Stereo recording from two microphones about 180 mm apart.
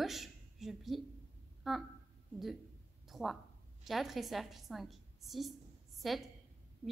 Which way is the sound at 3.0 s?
Centre (ahead or behind).